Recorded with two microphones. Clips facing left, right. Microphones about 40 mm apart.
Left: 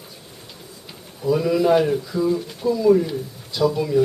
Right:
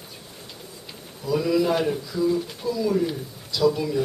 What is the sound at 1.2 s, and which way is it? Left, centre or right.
Speech, centre.